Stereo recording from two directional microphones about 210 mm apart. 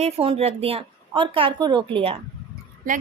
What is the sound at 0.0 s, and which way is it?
A woman's voice, 30° right (ahead or behind).